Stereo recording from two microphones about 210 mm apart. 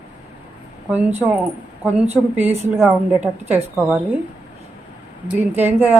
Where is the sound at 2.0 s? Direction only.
30° right (ahead or behind).